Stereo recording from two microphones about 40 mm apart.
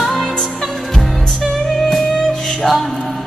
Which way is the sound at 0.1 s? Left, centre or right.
Centre.